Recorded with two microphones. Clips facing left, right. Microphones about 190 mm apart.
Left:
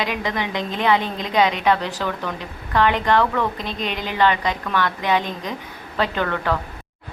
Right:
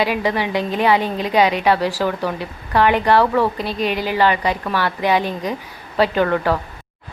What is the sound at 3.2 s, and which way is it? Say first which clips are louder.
Speech: right 4 dB; 35° right (ahead or behind).